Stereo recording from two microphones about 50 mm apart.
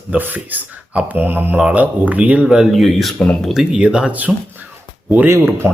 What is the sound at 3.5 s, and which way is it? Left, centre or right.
Speech, centre.